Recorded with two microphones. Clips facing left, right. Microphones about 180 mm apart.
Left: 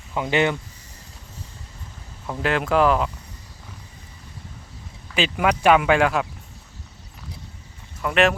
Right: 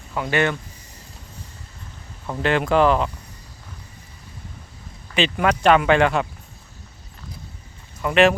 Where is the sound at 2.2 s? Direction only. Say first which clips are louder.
Right 2 dB; centre (ahead or behind).